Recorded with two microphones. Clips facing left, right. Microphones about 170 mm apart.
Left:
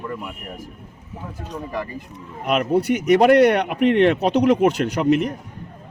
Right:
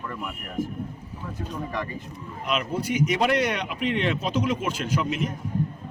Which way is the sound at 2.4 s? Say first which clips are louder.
Left 8 dB; 60° left (ahead or behind).